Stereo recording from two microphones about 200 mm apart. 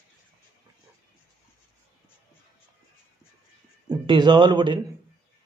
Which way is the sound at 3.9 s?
25° right (ahead or behind).